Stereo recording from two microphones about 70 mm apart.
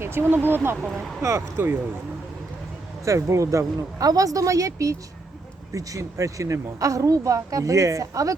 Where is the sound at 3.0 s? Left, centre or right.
Right.